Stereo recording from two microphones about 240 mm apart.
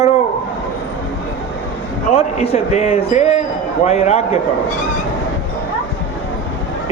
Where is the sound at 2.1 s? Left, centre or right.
Left.